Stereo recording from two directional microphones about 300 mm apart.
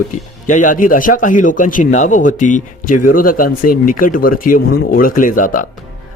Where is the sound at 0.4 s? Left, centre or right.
Left.